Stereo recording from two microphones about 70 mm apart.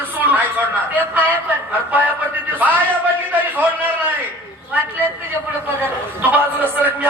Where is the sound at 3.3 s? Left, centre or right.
Right.